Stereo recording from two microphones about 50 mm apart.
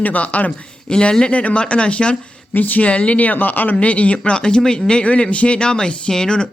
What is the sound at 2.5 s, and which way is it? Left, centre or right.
Speech, left.